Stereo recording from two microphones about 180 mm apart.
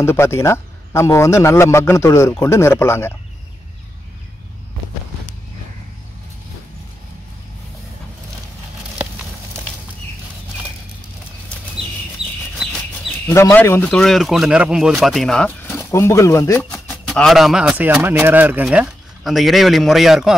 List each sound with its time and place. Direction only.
0.0 s speech: 15° left (ahead or behind)
13.3 s speech: 15° left (ahead or behind)
16.7 s speech: 5° left (ahead or behind)